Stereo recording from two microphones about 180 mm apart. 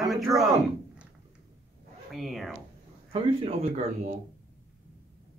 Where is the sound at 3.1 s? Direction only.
35° right (ahead or behind).